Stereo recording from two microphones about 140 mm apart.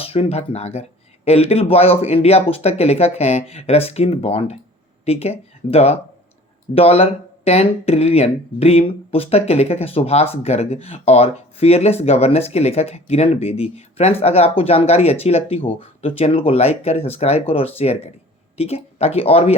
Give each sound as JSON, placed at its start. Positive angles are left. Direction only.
{"t": 0.0, "sound": "speech", "side_deg": 45}